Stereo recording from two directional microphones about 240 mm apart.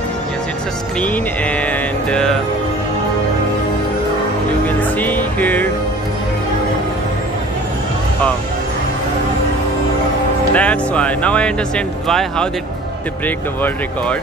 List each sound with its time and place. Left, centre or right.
1.0 s speech: centre
4.6 s music: centre
10.5 s speech: centre